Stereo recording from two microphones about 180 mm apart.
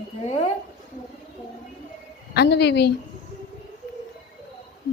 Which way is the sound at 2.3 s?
65° left (ahead or behind).